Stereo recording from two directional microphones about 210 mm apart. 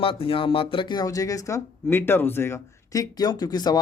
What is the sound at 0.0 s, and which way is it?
Speech, 25° left (ahead or behind).